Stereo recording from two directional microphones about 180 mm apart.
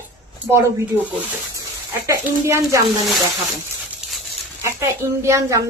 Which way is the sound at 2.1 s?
15° right (ahead or behind).